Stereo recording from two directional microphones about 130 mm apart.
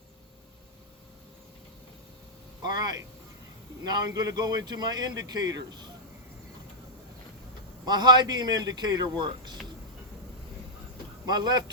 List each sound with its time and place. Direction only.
3.8 s a man's voice: 30° right (ahead or behind)
7.9 s a man's voice: 35° right (ahead or behind)
11.3 s a man's voice: 30° right (ahead or behind)